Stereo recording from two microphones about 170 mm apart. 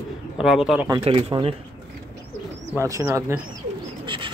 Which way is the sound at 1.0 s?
30° right (ahead or behind).